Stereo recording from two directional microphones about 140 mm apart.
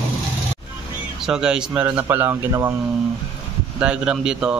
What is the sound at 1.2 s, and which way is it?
Speech, 5° right (ahead or behind).